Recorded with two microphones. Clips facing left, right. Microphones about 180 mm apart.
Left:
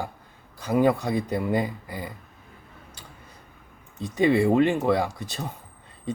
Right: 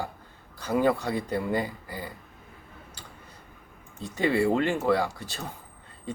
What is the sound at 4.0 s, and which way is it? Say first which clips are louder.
Speech: left 4 dB; 20° left (ahead or behind).